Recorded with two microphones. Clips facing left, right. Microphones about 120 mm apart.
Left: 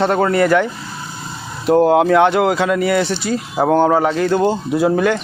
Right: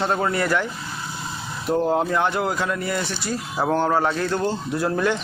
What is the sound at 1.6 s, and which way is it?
Speech, 75° left (ahead or behind).